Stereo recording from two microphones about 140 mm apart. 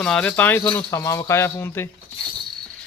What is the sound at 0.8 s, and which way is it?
Speech, 25° left (ahead or behind).